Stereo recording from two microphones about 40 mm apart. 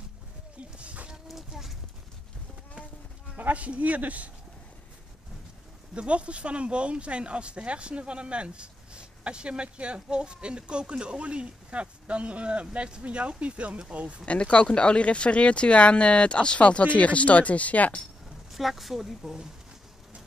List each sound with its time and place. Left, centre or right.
0.7 s a sound: right
1.3 s clip-clop: centre
3.3 s speech: right
5.9 s speech: right
14.2 s speech: left
18.5 s speech: centre